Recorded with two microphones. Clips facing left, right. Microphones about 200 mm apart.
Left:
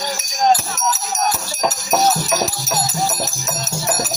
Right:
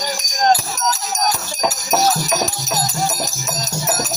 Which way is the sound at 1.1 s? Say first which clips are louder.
Even; 5° left (ahead or behind).